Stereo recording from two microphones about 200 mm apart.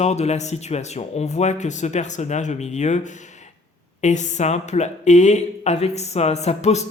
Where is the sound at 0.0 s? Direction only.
35° left (ahead or behind).